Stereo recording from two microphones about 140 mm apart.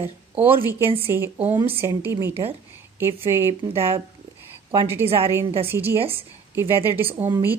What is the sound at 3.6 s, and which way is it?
Speech, 45° right (ahead or behind).